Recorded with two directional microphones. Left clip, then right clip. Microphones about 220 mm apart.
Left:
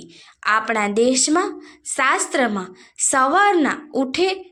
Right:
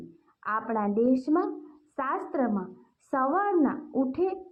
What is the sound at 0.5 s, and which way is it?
A woman's voice, 30° left (ahead or behind).